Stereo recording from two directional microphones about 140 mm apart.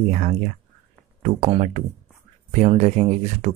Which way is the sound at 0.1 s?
60° right (ahead or behind).